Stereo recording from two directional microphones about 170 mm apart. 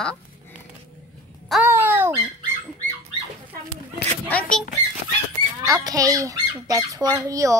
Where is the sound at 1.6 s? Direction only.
15° right (ahead or behind).